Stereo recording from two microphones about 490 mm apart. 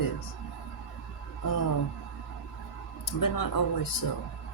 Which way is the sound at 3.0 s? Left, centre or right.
Left.